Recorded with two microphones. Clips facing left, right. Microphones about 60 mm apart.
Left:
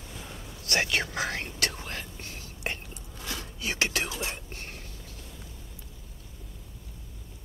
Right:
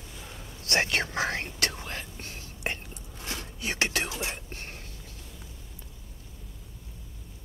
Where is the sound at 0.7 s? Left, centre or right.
Right.